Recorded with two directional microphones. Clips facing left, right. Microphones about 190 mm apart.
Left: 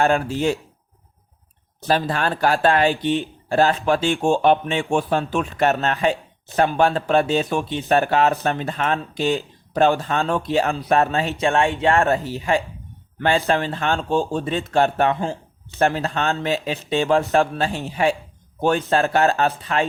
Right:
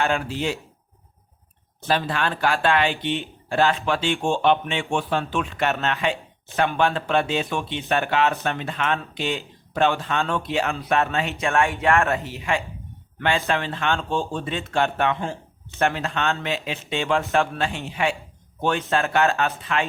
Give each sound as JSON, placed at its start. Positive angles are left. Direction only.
{"t": 0.0, "sound": "speech", "side_deg": 45}
{"t": 1.8, "sound": "speech", "side_deg": 40}